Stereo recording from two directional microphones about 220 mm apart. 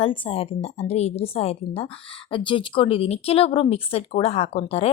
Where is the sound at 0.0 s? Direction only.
25° left (ahead or behind).